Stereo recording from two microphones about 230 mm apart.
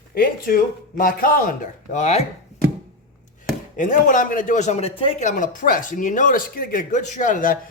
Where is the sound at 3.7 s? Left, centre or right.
Left.